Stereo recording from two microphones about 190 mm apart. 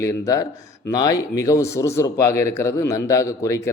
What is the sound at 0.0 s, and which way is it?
Speech, 15° left (ahead or behind).